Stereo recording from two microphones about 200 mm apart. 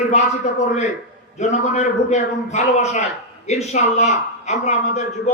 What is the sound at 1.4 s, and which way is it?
A man's voice, 35° left (ahead or behind).